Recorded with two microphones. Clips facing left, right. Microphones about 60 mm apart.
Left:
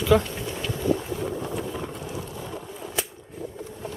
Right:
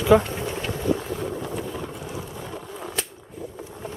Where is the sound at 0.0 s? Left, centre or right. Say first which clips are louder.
Right 3 dB; right.